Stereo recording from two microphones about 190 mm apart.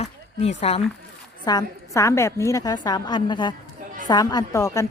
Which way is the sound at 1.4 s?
20° left (ahead or behind).